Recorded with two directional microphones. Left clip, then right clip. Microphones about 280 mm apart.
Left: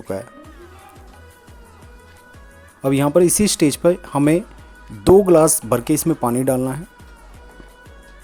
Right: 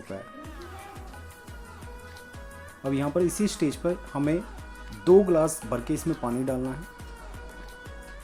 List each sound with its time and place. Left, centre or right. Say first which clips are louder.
0.1 s speech: left 11 dB; left
2.8 s speech: left 11 dB; left